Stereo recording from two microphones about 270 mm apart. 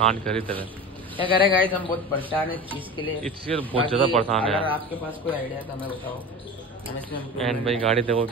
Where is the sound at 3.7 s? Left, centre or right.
Centre.